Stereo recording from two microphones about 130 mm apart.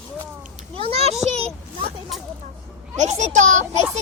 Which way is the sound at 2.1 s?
Centre (ahead or behind).